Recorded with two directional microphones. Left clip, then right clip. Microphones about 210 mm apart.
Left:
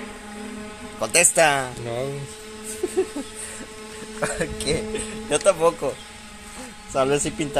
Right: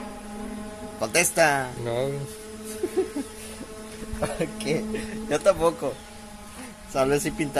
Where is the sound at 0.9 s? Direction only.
10° left (ahead or behind).